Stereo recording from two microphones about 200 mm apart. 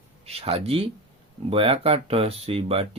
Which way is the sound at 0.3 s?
30° right (ahead or behind).